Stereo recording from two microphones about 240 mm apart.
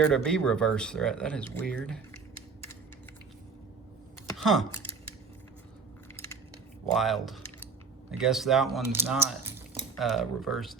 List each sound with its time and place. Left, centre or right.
0.0 s speech: centre
4.4 s speech: centre
6.9 s speech: centre
9.9 s speech: centre